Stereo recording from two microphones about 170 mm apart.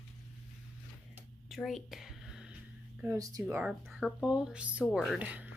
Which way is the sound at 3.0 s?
20° right (ahead or behind).